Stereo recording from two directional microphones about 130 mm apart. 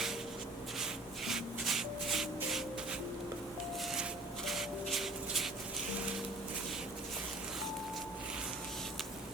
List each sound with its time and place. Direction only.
0.8 s rub: centre (ahead or behind)
4.4 s music: centre (ahead or behind)